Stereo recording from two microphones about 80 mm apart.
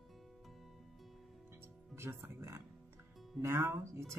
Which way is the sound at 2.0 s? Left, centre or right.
Right.